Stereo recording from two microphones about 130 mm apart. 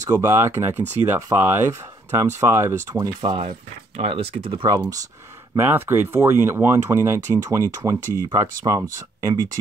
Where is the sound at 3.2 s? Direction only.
40° right (ahead or behind).